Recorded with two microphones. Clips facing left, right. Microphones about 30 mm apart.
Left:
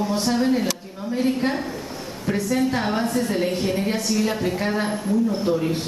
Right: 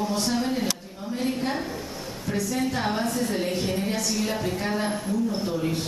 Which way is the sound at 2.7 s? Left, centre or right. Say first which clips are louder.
Left 3 dB; centre.